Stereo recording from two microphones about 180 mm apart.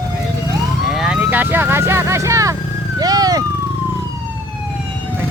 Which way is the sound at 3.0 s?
20° right (ahead or behind).